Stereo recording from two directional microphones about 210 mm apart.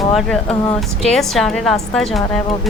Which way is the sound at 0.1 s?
Centre (ahead or behind).